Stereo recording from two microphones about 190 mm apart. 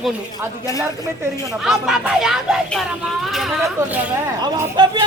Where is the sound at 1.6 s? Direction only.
Centre (ahead or behind).